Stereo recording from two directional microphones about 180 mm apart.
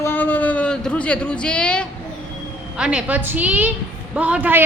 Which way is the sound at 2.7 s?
5° right (ahead or behind).